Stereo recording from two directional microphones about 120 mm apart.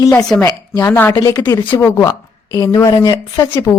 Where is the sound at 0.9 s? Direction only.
15° left (ahead or behind).